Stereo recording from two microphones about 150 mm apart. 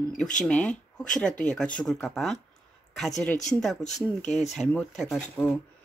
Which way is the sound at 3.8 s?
50° left (ahead or behind).